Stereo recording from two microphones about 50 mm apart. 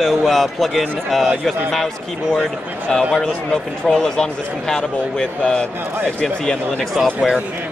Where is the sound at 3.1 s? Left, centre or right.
Centre.